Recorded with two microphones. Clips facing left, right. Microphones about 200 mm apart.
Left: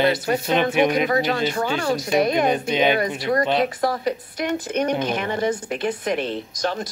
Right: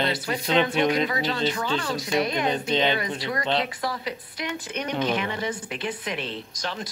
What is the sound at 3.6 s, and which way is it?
Speech, 50° left (ahead or behind).